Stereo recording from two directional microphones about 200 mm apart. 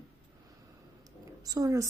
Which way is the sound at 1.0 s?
20° right (ahead or behind).